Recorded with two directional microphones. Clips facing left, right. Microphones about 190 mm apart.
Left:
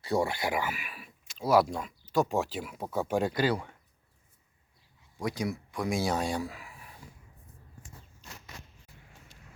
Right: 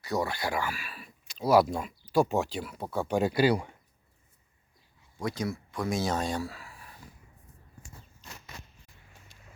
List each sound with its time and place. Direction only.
0.0 s speech: 30° left (ahead or behind)
1.3 s speech: centre (ahead or behind)
2.4 s speech: 5° left (ahead or behind); by 3.7 s 10° right (ahead or behind)
5.2 s speech: 15° left (ahead or behind)